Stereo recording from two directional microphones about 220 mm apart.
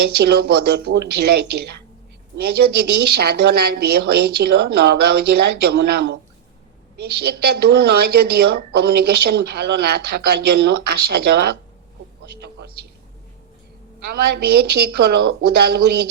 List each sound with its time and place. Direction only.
0.2 s a woman's voice: 45° right (ahead or behind)
14.1 s a woman's voice: 45° right (ahead or behind)